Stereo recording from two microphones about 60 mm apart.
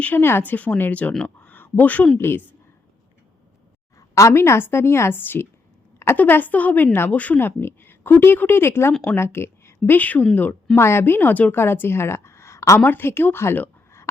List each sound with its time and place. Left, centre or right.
0.2 s speech: left
0.5 s a woman's voice: left
1.4 s a sound: left
2.1 s speech: left
4.1 s a woman's voice: left
10.8 s speech: left
11.5 s a woman's voice: left
12.8 s speech: left